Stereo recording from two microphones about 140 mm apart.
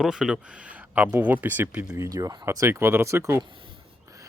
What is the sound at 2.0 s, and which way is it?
Speech, 25° right (ahead or behind).